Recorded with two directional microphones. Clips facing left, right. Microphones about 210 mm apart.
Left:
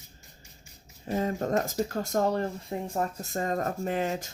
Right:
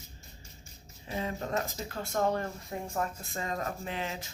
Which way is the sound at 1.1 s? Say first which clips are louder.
Left 7 dB; 45° left (ahead or behind).